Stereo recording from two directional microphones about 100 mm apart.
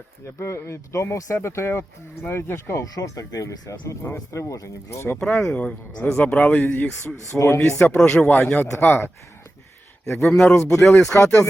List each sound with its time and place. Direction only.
0.3 s speech: 25° left (ahead or behind)
5.2 s speech: 5° left (ahead or behind)
7.3 s speech: 30° left (ahead or behind)
7.9 s speech: 10° left (ahead or behind)
8.7 s speech: 25° left (ahead or behind)
10.2 s a man's voice: 5° left (ahead or behind)
10.5 s speech: 30° left (ahead or behind)